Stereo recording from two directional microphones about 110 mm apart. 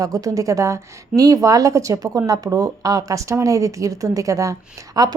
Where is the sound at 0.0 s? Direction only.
30° right (ahead or behind).